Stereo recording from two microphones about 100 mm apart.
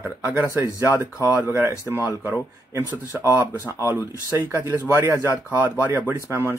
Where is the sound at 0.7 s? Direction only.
30° left (ahead or behind).